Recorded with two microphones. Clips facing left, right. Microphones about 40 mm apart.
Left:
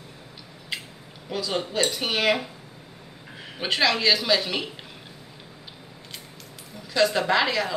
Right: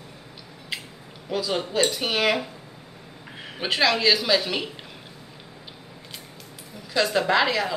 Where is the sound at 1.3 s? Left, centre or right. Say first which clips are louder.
Right 2 dB; centre.